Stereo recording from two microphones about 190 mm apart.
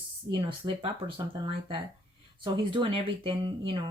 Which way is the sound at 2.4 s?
25° right (ahead or behind).